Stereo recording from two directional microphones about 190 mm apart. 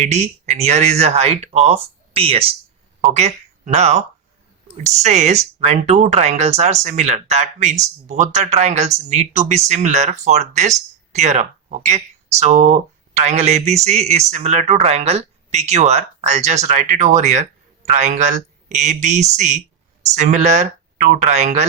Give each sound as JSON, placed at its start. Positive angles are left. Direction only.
{"t": 0.0, "sound": "speech", "side_deg": -35}